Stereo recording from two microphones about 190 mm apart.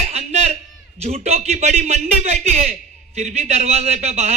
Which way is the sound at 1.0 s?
35° right (ahead or behind).